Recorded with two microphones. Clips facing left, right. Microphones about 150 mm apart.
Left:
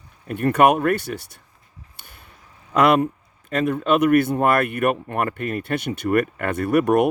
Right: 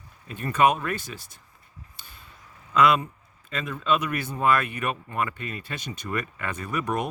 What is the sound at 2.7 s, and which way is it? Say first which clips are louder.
Speech: left 4 dB; 65° left (ahead or behind).